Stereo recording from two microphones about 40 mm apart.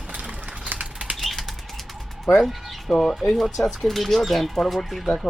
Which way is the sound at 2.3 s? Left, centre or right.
Centre.